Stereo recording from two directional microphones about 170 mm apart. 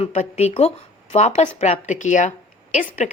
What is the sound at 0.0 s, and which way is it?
A woman's voice, 35° left (ahead or behind).